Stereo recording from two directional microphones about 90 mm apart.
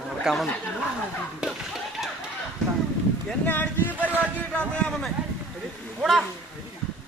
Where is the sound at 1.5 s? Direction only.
5° right (ahead or behind).